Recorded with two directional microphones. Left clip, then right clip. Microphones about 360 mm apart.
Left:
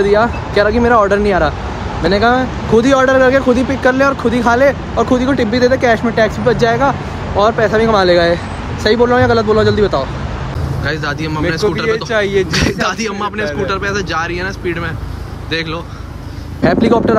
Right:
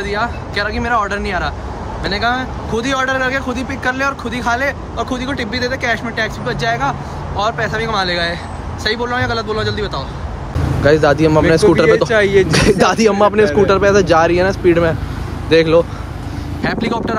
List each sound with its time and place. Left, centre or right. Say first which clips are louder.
0.0 s speech: left 8 dB; centre
12.0 s speech: right 2 dB; centre
12.4 s speech: right 3 dB; centre